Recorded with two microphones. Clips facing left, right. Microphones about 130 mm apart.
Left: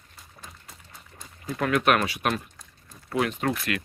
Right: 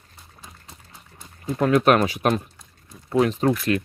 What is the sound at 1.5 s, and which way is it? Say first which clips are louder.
Speech: right 5 dB; 30° right (ahead or behind).